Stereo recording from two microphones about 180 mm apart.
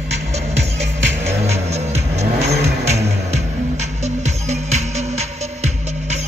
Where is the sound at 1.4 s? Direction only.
35° right (ahead or behind).